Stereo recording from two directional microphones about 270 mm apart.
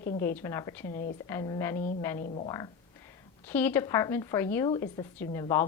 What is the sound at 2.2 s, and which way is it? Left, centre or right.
Speech, left.